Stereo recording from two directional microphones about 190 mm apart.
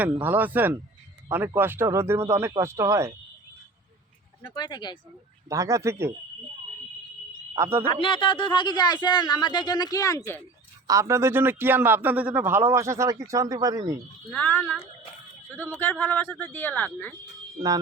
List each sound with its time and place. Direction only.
0.0 s a man's voice: 10° right (ahead or behind)
4.4 s speech: 20° left (ahead or behind)
5.5 s a man's voice: 15° right (ahead or behind)
7.5 s speech: 15° right (ahead or behind)
7.9 s speech: 25° left (ahead or behind)
10.8 s a man's voice: 15° right (ahead or behind)
14.3 s speech: 10° left (ahead or behind)